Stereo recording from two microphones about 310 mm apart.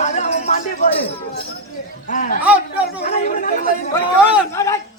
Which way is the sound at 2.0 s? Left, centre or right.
Left.